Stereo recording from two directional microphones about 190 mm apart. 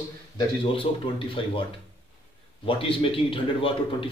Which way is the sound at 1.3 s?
30° left (ahead or behind).